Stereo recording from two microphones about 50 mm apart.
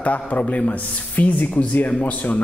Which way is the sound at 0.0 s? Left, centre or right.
Left.